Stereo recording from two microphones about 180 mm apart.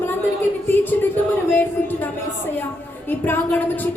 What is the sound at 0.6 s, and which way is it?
Speech, 10° left (ahead or behind).